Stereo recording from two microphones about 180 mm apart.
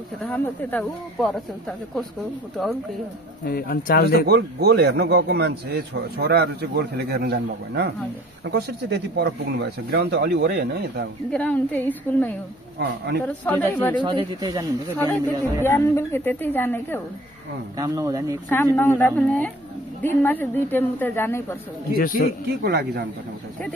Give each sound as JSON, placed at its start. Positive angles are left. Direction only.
{"t": 0.2, "sound": "a woman's voice", "side_deg": 10}
{"t": 3.4, "sound": "speech", "side_deg": 55}
{"t": 4.3, "sound": "a man's voice", "side_deg": -65}
{"t": 11.3, "sound": "a woman's voice", "side_deg": 10}
{"t": 12.7, "sound": "speech", "side_deg": -70}
{"t": 13.5, "sound": "a woman's voice", "side_deg": 10}
{"t": 14.0, "sound": "speech", "side_deg": -25}
{"t": 15.0, "sound": "a woman's voice", "side_deg": 15}
{"t": 17.7, "sound": "speech", "side_deg": -20}
{"t": 18.5, "sound": "a woman's voice", "side_deg": 10}
{"t": 21.9, "sound": "speech", "side_deg": 55}
{"t": 22.5, "sound": "a man's voice", "side_deg": -65}